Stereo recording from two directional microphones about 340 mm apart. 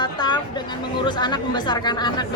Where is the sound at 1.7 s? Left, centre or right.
Centre.